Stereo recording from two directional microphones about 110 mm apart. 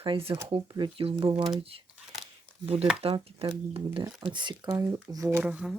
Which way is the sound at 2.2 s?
Centre (ahead or behind).